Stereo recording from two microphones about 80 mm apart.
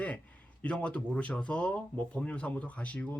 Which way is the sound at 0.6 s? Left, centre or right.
Centre.